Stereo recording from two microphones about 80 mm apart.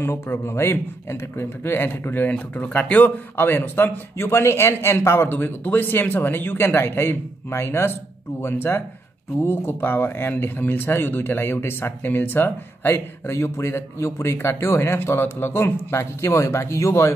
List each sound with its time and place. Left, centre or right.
0.0 s speech: left